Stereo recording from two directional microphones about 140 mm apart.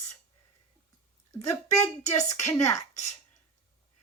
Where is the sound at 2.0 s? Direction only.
55° left (ahead or behind).